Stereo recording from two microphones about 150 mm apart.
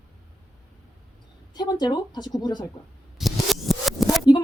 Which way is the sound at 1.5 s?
30° left (ahead or behind).